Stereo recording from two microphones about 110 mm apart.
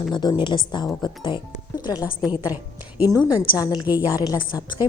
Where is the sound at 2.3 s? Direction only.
15° right (ahead or behind).